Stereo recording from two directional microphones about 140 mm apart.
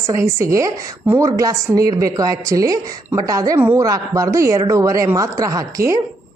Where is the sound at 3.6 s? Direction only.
15° right (ahead or behind).